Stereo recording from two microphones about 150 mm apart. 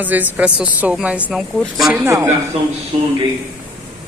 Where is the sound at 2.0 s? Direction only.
20° right (ahead or behind).